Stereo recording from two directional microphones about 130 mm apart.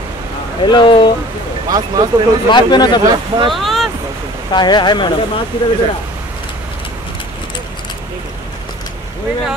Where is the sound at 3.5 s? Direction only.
Centre (ahead or behind).